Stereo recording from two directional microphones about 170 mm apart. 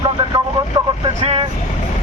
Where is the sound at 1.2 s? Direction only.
35° right (ahead or behind).